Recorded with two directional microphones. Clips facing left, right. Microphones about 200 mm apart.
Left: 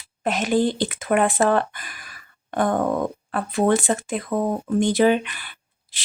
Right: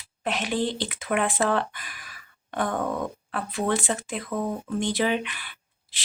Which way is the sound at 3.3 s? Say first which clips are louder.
Left 7 dB; 45° left (ahead or behind).